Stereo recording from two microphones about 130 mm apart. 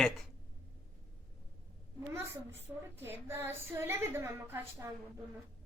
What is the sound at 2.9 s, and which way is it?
A woman's voice, 20° right (ahead or behind).